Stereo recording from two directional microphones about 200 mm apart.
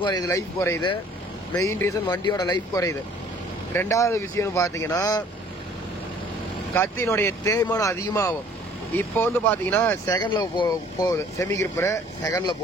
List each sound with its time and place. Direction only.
0.0 s speech: 20° left (ahead or behind)
6.7 s speech: 10° left (ahead or behind)